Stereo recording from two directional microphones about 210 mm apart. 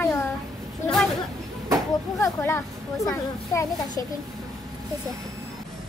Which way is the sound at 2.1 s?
15° left (ahead or behind).